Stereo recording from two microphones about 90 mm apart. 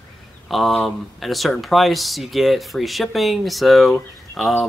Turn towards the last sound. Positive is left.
turn(degrees=0)  # may be behind; listen again after turning